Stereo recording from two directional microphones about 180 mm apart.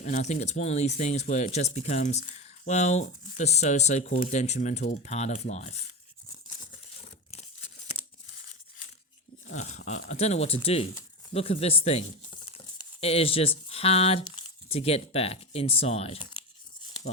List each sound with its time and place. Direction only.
0.0 s speech: 40° left (ahead or behind)
7.3 s tearing: 35° left (ahead or behind)
9.5 s speech: 40° left (ahead or behind)